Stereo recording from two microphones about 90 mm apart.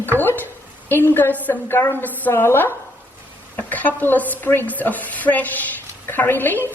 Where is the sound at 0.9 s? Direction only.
20° left (ahead or behind).